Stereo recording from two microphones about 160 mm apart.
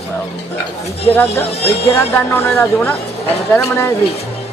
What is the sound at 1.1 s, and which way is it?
Speech, 10° left (ahead or behind).